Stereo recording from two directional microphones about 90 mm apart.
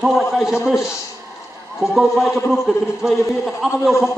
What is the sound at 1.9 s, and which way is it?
A man's voice, 5° right (ahead or behind).